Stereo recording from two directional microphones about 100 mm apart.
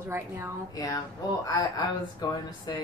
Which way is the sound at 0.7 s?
35° left (ahead or behind).